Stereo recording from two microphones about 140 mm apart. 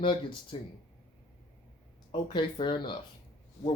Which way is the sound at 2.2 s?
35° left (ahead or behind).